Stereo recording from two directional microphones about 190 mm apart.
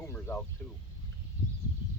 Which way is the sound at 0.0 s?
15° left (ahead or behind).